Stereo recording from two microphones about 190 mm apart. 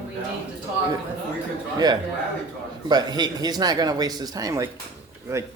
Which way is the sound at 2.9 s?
20° right (ahead or behind).